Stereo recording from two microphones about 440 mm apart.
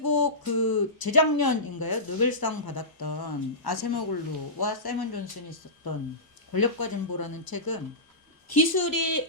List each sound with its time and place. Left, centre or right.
0.0 s speech: left